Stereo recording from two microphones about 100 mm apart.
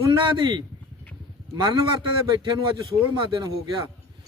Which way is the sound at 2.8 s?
55° right (ahead or behind).